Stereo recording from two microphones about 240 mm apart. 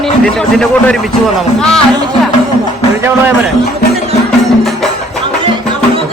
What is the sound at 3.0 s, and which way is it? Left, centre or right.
Speech, centre.